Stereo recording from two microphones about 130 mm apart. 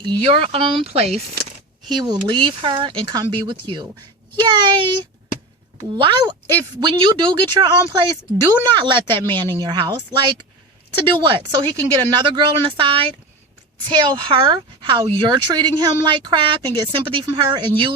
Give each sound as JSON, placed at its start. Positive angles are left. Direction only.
{"t": 0.0, "sound": "speech", "side_deg": -45}
{"t": 1.9, "sound": "a woman's voice", "side_deg": -35}